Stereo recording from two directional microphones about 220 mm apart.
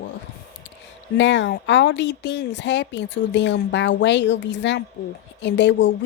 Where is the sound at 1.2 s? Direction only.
55° left (ahead or behind).